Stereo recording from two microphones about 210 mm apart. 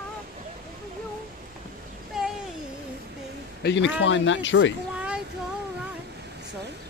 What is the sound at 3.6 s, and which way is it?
Speech, 60° left (ahead or behind).